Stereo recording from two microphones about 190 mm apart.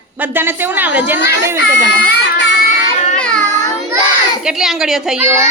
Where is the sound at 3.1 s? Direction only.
5° left (ahead or behind).